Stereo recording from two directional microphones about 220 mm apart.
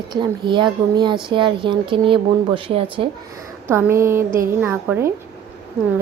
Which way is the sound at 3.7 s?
10° right (ahead or behind).